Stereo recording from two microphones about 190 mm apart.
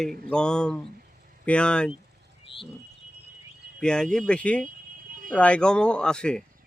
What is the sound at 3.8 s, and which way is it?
Speech, 5° left (ahead or behind).